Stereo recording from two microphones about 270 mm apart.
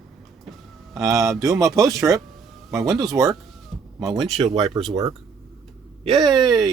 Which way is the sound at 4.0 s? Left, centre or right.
Centre.